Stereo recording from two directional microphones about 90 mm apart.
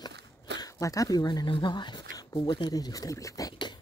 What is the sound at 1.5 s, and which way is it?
Speech, 60° left (ahead or behind).